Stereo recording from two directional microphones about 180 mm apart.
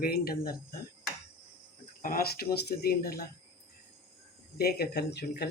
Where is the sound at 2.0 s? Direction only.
55° left (ahead or behind).